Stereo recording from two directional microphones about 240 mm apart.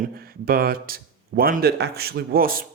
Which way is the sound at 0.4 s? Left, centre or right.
Right.